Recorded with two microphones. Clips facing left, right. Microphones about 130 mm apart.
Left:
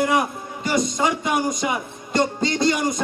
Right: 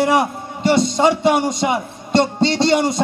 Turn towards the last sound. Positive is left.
turn(degrees=-30)  # may be behind; listen again after turning